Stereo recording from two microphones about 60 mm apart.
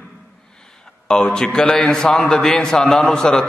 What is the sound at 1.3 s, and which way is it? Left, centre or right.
A man's voice, centre.